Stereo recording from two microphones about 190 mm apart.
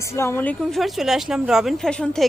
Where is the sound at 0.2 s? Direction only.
10° left (ahead or behind).